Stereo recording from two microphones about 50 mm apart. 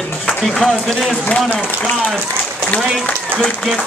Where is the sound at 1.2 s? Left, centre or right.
Left.